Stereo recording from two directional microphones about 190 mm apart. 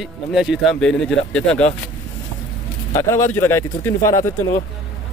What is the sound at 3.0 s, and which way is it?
A man's voice, 15° left (ahead or behind).